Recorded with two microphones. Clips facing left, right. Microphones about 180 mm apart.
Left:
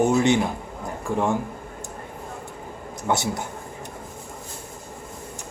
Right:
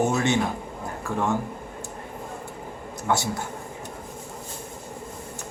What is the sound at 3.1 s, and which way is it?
Speech, 20° left (ahead or behind).